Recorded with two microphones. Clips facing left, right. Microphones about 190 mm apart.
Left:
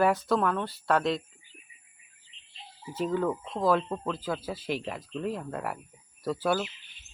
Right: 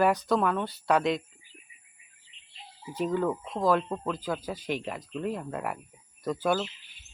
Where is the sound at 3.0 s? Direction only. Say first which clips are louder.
Even; centre (ahead or behind).